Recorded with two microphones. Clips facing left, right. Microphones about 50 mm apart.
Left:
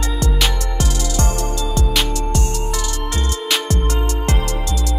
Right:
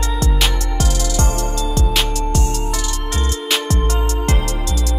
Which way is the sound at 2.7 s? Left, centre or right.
Left.